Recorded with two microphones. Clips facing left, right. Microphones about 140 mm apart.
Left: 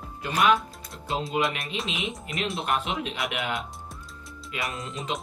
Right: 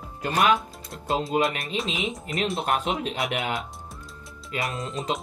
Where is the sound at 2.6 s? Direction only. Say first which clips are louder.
Right 2 dB; 40° right (ahead or behind).